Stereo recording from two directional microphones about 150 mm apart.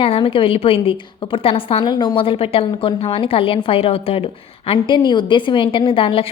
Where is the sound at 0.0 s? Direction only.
40° left (ahead or behind).